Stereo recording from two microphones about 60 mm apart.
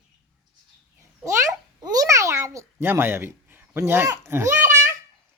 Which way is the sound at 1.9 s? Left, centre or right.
Right.